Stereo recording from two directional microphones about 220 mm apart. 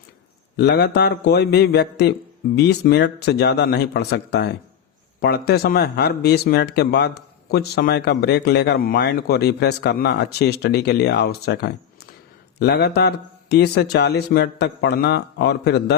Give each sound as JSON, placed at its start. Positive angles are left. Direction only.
{"t": 0.5, "sound": "speech", "side_deg": 50}